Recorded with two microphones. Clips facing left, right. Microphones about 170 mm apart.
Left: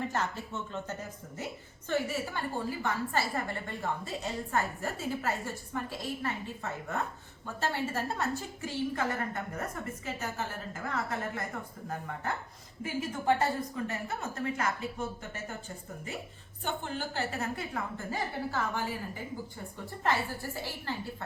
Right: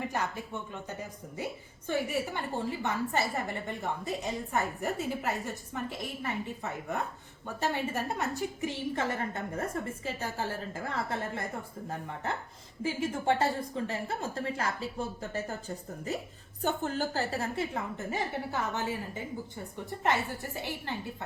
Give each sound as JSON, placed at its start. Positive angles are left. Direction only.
{"t": 0.1, "sound": "a woman's voice", "side_deg": -15}
{"t": 16.6, "sound": "a woman's voice", "side_deg": -40}
{"t": 17.5, "sound": "a woman's voice", "side_deg": -25}